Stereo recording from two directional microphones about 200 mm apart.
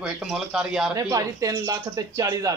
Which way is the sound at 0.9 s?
15° right (ahead or behind).